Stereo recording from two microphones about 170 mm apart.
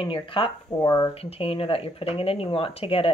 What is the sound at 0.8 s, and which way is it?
Speech, 20° left (ahead or behind).